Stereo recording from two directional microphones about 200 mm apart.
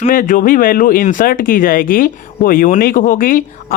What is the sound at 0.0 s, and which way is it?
Speech, 40° left (ahead or behind).